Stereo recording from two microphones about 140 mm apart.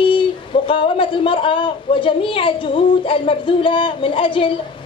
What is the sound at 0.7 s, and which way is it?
A woman's voice, 40° left (ahead or behind).